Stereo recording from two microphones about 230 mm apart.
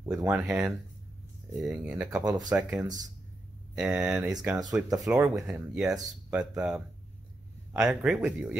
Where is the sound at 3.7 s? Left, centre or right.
Centre.